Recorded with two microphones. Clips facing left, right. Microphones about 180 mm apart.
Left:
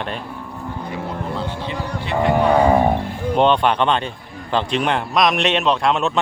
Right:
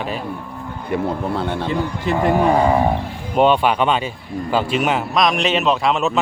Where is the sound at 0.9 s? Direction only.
60° right (ahead or behind); by 2.2 s 45° right (ahead or behind).